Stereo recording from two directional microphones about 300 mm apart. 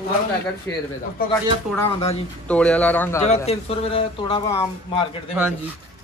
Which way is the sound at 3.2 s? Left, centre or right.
Left.